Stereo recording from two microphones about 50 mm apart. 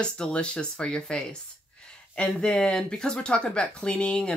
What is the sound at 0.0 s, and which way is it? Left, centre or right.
Speech, centre.